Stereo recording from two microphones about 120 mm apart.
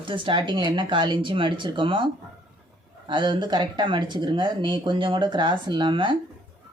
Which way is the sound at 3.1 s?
40° right (ahead or behind).